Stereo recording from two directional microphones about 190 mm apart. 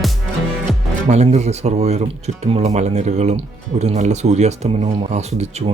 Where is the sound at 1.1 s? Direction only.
35° right (ahead or behind).